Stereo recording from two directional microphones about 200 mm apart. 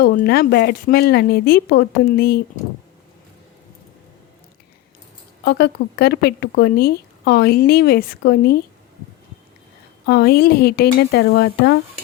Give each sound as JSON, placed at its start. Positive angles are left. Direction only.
{"t": 0.0, "sound": "speech", "side_deg": 50}
{"t": 5.5, "sound": "speech", "side_deg": 55}
{"t": 10.1, "sound": "speech", "side_deg": 55}